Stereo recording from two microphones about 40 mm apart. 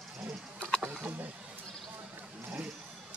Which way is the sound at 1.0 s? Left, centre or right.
Right.